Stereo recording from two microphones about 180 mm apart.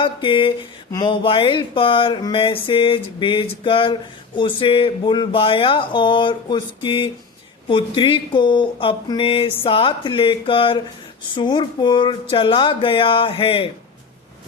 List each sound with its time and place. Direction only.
0.0 s speech: 30° left (ahead or behind)